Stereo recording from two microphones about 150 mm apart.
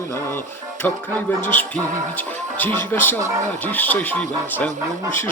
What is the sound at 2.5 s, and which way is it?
Speech, 10° left (ahead or behind).